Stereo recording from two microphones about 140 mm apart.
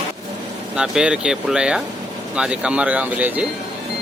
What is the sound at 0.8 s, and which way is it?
Speech, 5° right (ahead or behind).